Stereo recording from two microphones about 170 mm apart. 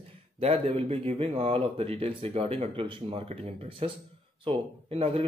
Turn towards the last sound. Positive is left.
turn(degrees=-35)  # may be behind; listen again after turning